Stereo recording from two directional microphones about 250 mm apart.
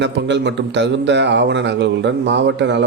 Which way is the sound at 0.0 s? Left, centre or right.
Right.